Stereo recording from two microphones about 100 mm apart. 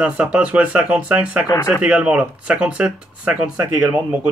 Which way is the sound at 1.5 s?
30° left (ahead or behind).